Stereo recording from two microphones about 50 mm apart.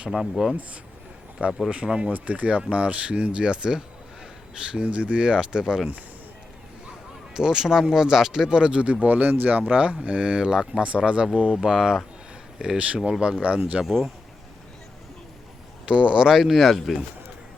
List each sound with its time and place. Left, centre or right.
0.1 s speech: centre
1.4 s speech: right
7.3 s speech: centre
9.0 s speech: right
15.9 s speech: right; by 17.0 s centre